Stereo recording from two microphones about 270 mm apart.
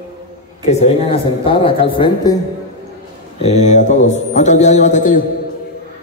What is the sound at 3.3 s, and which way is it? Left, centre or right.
A man's voice, left.